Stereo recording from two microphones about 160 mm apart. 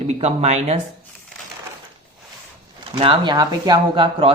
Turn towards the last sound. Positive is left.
turn(degrees=-35)  # may be behind; listen again after turning